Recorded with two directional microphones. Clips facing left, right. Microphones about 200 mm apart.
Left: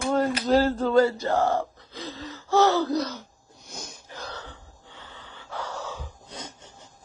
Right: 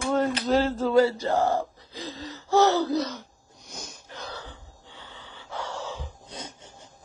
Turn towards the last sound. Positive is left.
turn(degrees=-25)  # may be behind; listen again after turning